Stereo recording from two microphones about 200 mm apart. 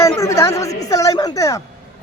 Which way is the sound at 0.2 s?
15° left (ahead or behind).